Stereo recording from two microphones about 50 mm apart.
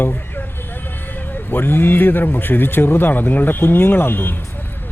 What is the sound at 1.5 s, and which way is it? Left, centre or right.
Speech, left.